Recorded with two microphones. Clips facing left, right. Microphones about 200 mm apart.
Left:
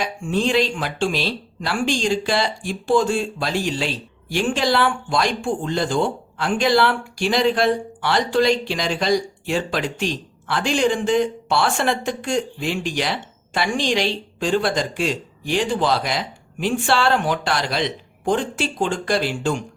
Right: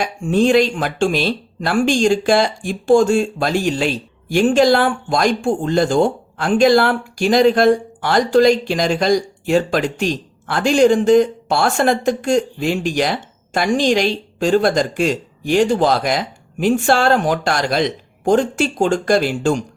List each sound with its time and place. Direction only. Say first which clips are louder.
0.0 s speech: right 6 dB; 45° right (ahead or behind)